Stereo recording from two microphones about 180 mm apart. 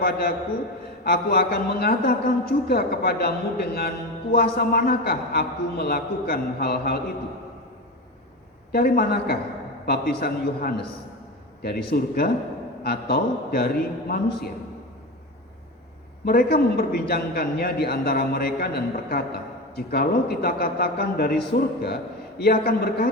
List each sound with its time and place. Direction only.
0.0 s a man's voice: 60° left (ahead or behind)
8.7 s a man's voice: 60° left (ahead or behind)
16.2 s a man's voice: 60° left (ahead or behind)